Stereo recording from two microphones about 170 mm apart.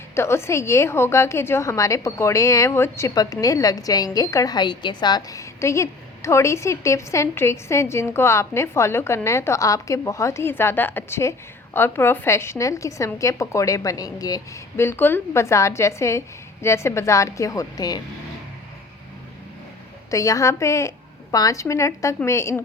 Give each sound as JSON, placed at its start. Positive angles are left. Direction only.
{"t": 0.1, "sound": "a woman's voice", "side_deg": 15}
{"t": 20.1, "sound": "a woman's voice", "side_deg": 20}